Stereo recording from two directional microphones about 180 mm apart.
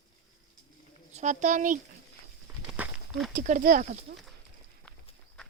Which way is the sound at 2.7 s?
5° right (ahead or behind).